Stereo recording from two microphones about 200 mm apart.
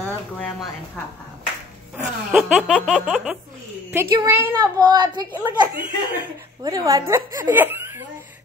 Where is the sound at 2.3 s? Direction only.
Centre (ahead or behind).